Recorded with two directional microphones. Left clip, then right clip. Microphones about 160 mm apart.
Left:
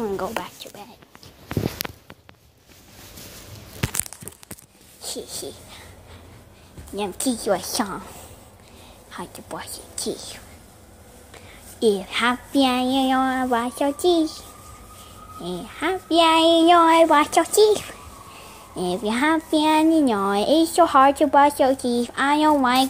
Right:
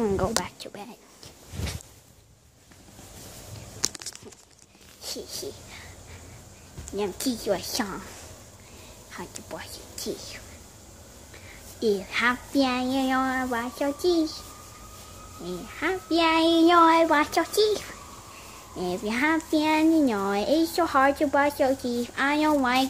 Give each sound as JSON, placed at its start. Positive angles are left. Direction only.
{"t": 0.0, "sound": "a sound", "side_deg": -30}
{"t": 5.0, "sound": "a sound", "side_deg": 20}
{"t": 7.0, "sound": "speech", "side_deg": 15}
{"t": 9.1, "sound": "speech", "side_deg": 20}
{"t": 11.8, "sound": "speech", "side_deg": 20}
{"t": 15.4, "sound": "speech", "side_deg": 20}